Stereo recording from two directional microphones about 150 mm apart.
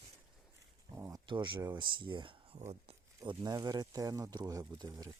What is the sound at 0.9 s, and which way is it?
Speech, 15° right (ahead or behind).